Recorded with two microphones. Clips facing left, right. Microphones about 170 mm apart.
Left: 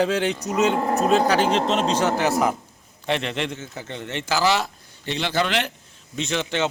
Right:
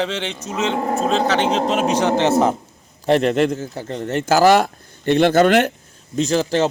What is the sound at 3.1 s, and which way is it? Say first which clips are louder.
A man's voice: right 10 dB; 45° right (ahead or behind).